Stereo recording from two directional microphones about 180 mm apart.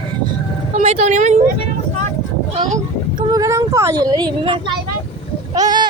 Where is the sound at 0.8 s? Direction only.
40° right (ahead or behind).